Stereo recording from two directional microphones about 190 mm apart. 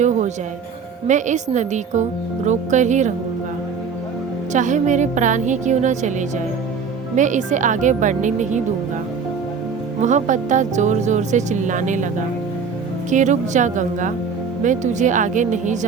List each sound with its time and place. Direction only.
0.0 s music: 40° right (ahead or behind)
1.0 s speech: 40° right (ahead or behind)
4.5 s speech: 40° right (ahead or behind)
10.0 s speech: 40° right (ahead or behind)
13.1 s speech: 40° right (ahead or behind)